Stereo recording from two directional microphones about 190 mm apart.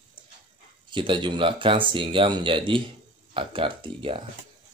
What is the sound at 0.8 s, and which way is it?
Speech, 25° right (ahead or behind).